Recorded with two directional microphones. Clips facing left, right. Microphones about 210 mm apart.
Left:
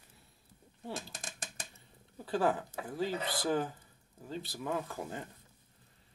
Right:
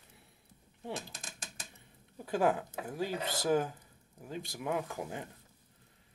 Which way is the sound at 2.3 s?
15° right (ahead or behind).